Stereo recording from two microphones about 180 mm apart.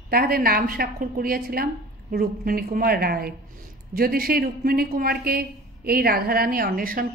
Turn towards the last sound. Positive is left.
turn(degrees=-50)  # may be behind; listen again after turning